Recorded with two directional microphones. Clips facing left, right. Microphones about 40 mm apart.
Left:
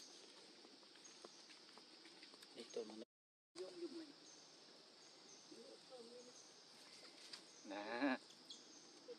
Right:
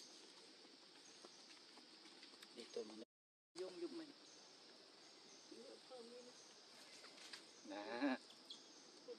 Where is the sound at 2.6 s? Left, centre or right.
Centre.